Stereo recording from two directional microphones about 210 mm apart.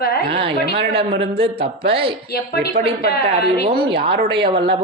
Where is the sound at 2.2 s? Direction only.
50° left (ahead or behind).